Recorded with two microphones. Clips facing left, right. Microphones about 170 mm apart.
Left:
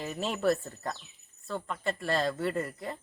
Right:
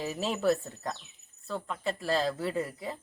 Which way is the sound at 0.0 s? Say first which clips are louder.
Even; 5° right (ahead or behind).